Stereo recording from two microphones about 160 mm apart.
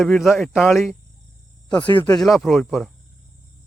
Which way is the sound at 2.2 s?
Centre (ahead or behind).